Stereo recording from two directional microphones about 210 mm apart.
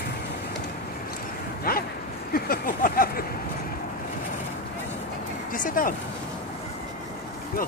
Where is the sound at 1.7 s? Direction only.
45° left (ahead or behind).